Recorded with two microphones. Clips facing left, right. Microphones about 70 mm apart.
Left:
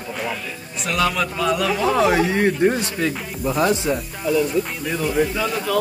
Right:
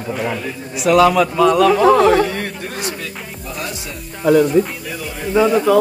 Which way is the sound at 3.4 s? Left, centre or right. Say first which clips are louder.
Left 9 dB; left.